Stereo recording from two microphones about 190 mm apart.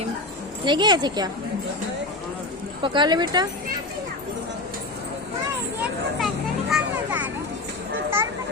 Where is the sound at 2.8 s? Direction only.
25° right (ahead or behind).